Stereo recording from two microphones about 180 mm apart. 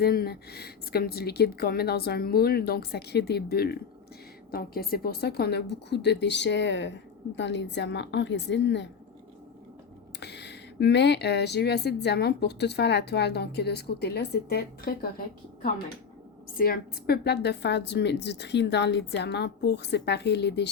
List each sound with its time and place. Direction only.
0.0 s a woman's voice: 60° left (ahead or behind); by 8.9 s 75° left (ahead or behind)
10.2 s speech: 70° left (ahead or behind)
16.6 s speech: 55° left (ahead or behind); by 20.7 s 70° left (ahead or behind)